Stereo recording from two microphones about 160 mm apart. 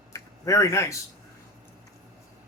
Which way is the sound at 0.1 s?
20° left (ahead or behind).